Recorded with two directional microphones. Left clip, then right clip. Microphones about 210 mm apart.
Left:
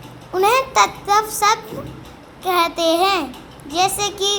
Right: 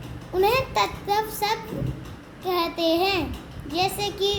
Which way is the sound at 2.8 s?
5° left (ahead or behind).